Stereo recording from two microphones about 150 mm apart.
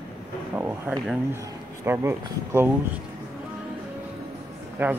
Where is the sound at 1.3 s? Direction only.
15° right (ahead or behind).